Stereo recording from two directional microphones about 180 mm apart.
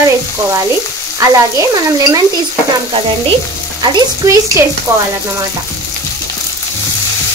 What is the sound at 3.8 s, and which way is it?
Stir, 20° right (ahead or behind).